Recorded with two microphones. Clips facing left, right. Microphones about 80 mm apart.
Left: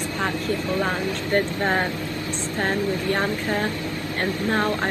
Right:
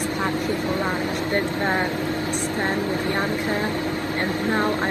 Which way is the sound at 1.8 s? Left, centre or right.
Right.